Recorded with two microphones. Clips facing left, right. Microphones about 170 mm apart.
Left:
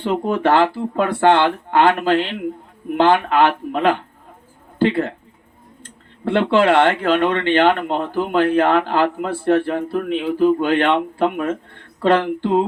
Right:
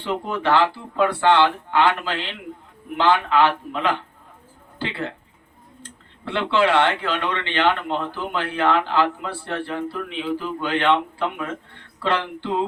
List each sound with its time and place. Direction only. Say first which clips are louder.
0.0 s speech: left 6 dB; 50° left (ahead or behind)